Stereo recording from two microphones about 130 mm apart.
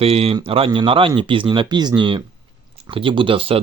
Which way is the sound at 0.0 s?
50° right (ahead or behind).